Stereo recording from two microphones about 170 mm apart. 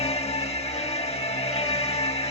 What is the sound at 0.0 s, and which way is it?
Music, 40° left (ahead or behind).